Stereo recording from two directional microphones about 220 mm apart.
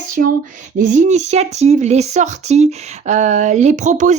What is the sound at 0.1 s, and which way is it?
A woman's voice, 40° right (ahead or behind).